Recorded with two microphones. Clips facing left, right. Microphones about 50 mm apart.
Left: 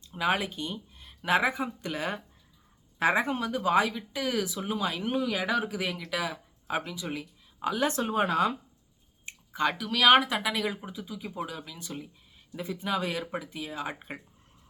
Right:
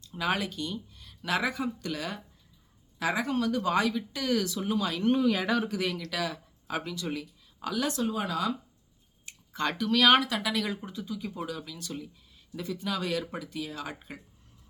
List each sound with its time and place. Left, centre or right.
0.0 s speech: centre
5.1 s speech: centre; by 8.5 s left
9.5 s speech: centre